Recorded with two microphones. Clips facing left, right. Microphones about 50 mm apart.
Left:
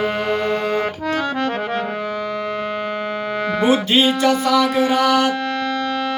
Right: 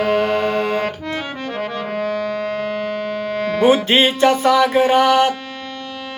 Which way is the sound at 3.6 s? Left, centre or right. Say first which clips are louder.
Right 2 dB; right.